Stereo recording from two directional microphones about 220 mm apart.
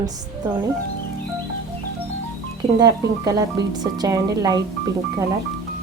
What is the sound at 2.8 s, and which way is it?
A woman's voice, 15° right (ahead or behind).